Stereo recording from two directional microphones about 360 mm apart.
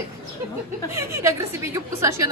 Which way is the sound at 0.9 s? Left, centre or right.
Centre.